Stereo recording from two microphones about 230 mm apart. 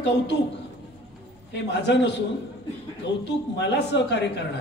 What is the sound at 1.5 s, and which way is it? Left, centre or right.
Speech, left.